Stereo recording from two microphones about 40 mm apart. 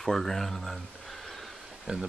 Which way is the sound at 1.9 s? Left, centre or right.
Centre.